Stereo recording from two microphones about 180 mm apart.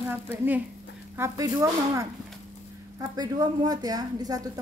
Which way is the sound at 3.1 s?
20° right (ahead or behind).